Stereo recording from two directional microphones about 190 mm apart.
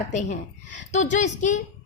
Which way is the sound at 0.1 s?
40° left (ahead or behind).